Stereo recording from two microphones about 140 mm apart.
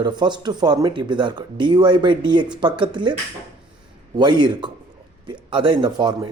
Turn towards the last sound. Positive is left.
turn(degrees=-35)  # may be behind; listen again after turning